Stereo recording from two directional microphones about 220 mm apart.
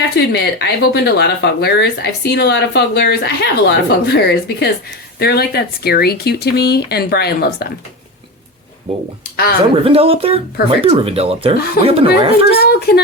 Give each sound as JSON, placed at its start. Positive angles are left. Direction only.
{"t": 0.3, "sound": "speech", "side_deg": 50}
{"t": 9.3, "sound": "speech", "side_deg": 45}
{"t": 9.7, "sound": "speech", "side_deg": -25}
{"t": 12.5, "sound": "speech", "side_deg": 45}